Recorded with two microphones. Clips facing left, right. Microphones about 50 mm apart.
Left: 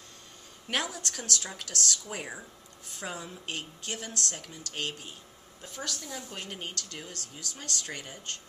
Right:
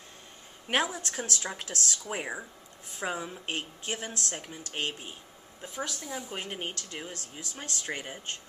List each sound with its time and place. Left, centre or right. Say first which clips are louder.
0.7 s a woman's voice: right 4 dB; right